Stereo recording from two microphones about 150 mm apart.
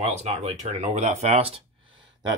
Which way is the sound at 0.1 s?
45° right (ahead or behind).